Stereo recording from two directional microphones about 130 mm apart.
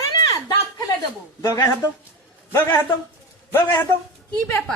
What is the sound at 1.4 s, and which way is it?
Speech, 30° left (ahead or behind).